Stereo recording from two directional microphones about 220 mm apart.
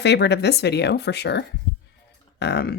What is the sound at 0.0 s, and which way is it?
A woman's voice, 50° left (ahead or behind).